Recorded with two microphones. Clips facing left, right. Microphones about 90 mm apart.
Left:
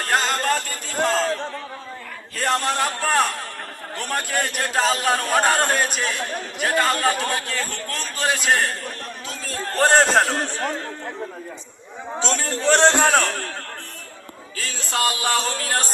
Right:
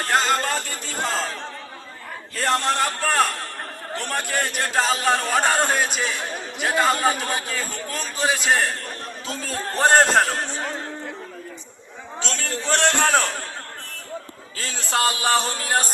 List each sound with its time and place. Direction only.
0.0 s a sound: centre (ahead or behind)
3.9 s a man's voice: centre (ahead or behind)
9.7 s a man's voice: 5° right (ahead or behind)
12.7 s a man's voice: 30° left (ahead or behind)
13.0 s a man's voice: centre (ahead or behind)
14.6 s music: 30° right (ahead or behind)